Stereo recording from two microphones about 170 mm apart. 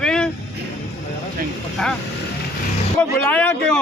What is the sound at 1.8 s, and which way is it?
Speech, 5° left (ahead or behind).